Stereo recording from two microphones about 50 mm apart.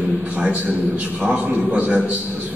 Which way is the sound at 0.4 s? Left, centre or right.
Right.